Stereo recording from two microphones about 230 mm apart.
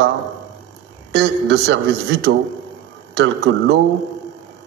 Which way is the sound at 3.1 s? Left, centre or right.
Right.